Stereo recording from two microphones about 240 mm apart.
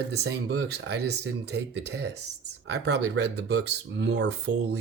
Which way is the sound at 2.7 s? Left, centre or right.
Right.